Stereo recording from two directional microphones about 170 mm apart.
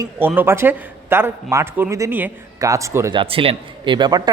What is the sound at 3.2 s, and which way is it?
Speech, 35° right (ahead or behind).